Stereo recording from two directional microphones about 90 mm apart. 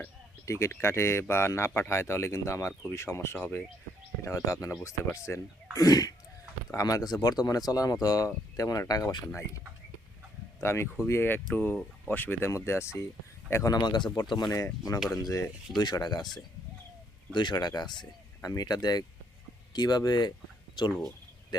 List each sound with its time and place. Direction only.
0.4 s speech: 30° left (ahead or behind)
5.7 s a sound: 45° left (ahead or behind)
6.7 s speech: 40° left (ahead or behind)
10.6 s speech: 30° left (ahead or behind); by 16.2 s 50° left (ahead or behind)
17.3 s speech: 55° left (ahead or behind)
21.5 s a sound: 55° left (ahead or behind)